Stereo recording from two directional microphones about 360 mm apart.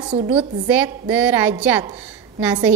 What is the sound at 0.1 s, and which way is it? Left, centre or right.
Speech, centre.